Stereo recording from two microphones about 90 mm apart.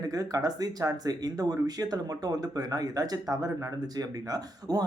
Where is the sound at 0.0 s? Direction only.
40° right (ahead or behind).